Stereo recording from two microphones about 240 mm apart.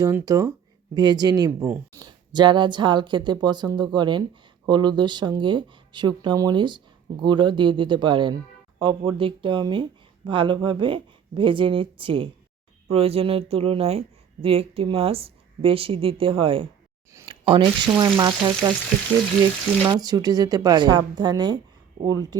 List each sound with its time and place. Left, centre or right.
0.0 s a woman's voice: centre
19.9 s a woman's voice: centre